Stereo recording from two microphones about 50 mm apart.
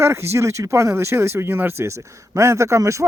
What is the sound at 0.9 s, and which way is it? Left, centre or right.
Speech, right.